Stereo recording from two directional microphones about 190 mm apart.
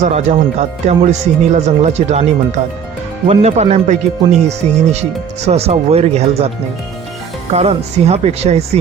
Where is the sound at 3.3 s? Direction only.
35° right (ahead or behind).